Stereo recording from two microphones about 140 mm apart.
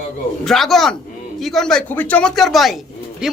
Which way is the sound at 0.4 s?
Centre (ahead or behind).